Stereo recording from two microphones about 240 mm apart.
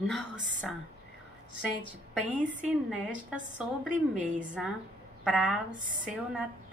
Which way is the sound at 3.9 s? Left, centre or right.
Right.